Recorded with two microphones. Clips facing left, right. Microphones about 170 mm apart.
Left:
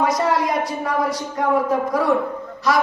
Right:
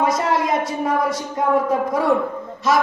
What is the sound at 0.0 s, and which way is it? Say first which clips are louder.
Speech: even; 25° right (ahead or behind).